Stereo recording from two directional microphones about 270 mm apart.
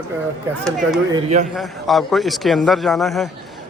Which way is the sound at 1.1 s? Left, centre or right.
Right.